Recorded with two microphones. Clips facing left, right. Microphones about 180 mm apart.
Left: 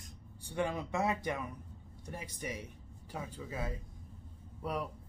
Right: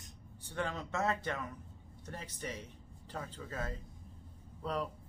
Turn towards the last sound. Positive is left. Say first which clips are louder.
# even
turn(degrees=10)  # may be behind; listen again after turning